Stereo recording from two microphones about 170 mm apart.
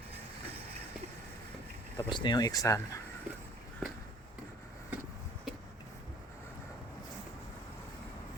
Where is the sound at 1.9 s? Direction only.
25° left (ahead or behind).